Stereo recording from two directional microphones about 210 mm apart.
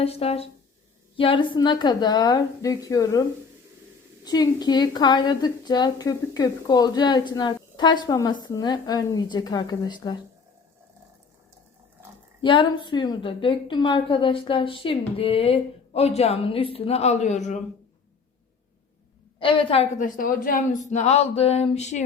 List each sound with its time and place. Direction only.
0.0 s a woman's voice: 30° left (ahead or behind)
12.4 s a woman's voice: 20° left (ahead or behind)
19.4 s a woman's voice: 25° left (ahead or behind)